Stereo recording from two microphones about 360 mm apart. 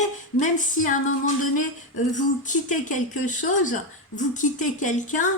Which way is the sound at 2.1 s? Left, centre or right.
Left.